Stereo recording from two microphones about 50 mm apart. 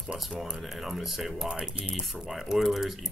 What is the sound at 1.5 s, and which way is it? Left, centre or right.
Speech, centre.